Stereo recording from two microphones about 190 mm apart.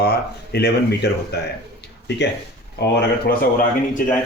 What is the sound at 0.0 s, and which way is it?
A man's voice, 55° left (ahead or behind).